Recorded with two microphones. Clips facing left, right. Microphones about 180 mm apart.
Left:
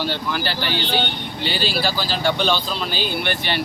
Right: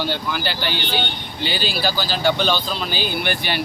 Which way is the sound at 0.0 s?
Centre (ahead or behind).